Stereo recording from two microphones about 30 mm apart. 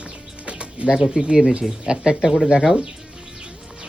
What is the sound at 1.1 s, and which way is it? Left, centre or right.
Speech, right.